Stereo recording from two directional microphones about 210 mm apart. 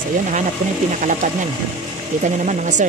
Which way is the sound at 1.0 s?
35° right (ahead or behind).